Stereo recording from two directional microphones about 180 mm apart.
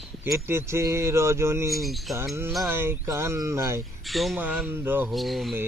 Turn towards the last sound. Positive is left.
turn(degrees=0)  # may be behind; listen again after turning